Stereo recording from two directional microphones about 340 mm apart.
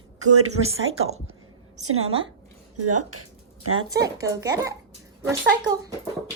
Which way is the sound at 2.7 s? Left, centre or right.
Right.